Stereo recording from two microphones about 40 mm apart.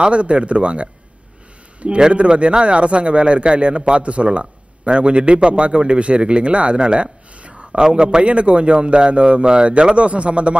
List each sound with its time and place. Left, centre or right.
0.0 s a man's voice: right